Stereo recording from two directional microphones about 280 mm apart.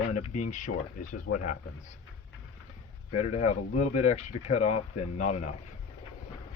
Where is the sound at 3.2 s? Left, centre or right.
Left.